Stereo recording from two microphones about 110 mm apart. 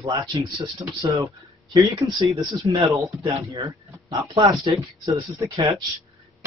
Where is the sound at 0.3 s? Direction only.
30° right (ahead or behind).